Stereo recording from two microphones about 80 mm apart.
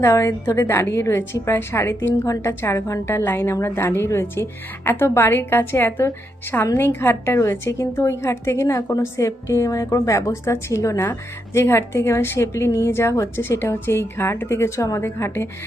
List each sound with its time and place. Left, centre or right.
0.2 s a woman's voice: left
0.5 s a woman's voice: left